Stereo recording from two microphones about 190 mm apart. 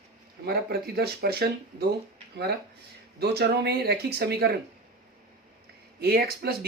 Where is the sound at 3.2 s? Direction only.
60° right (ahead or behind).